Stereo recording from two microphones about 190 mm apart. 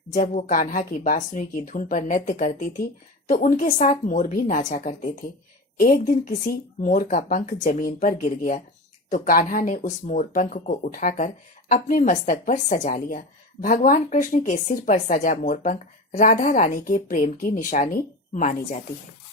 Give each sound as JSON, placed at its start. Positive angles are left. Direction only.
{"t": 0.1, "sound": "a woman's voice", "side_deg": 40}